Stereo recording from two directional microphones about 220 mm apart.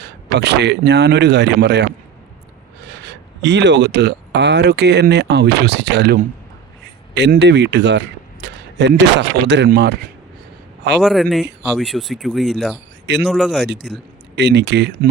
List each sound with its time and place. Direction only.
0.0 s a man's voice: 50° right (ahead or behind)
2.9 s a man's voice: 50° right (ahead or behind)
11.0 s speech: centre (ahead or behind)
14.3 s a man's voice: 50° right (ahead or behind)